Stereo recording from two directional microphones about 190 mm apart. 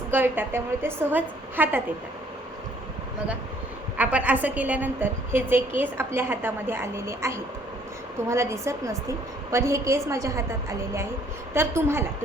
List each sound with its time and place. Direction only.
0.1 s a woman's voice: 10° right (ahead or behind)
3.9 s a woman's voice: 5° right (ahead or behind)